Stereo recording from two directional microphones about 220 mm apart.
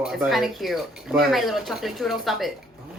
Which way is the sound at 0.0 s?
Centre (ahead or behind).